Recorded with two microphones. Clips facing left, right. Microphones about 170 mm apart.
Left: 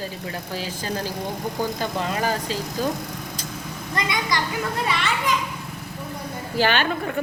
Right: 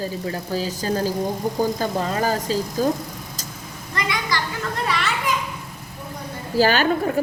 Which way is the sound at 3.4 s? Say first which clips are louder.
Left 2 dB; 40° right (ahead or behind).